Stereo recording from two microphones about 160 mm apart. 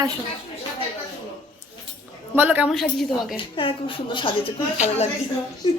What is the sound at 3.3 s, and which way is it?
A woman's voice, 35° left (ahead or behind).